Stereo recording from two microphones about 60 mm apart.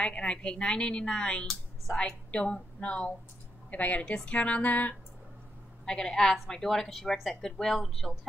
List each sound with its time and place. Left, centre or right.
0.0 s a woman's voice: centre
5.9 s a woman's voice: centre